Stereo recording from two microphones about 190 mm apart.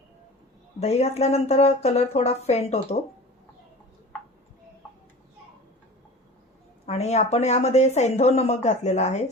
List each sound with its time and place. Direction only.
0.8 s a woman's voice: 35° left (ahead or behind)
6.8 s a woman's voice: 35° left (ahead or behind)